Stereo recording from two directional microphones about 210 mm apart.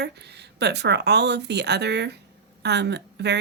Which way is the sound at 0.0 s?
55° right (ahead or behind).